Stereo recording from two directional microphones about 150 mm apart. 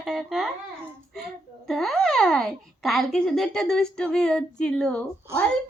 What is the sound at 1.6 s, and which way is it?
A child's voice, centre (ahead or behind).